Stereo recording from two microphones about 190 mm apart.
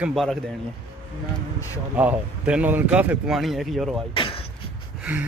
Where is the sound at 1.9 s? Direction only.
10° right (ahead or behind).